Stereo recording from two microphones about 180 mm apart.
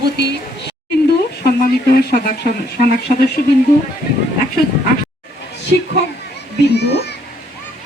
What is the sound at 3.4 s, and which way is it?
Speech, 50° left (ahead or behind).